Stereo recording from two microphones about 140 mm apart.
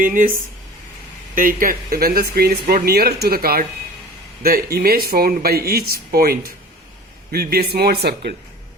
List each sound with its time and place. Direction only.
0.0 s speech: 70° right (ahead or behind)
1.4 s speech: 75° right (ahead or behind)